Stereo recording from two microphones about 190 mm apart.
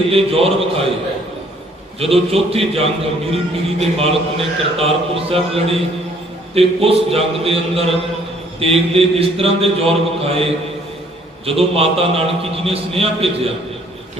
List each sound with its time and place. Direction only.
0.1 s speech: 30° right (ahead or behind)
2.0 s speech: 30° right (ahead or behind)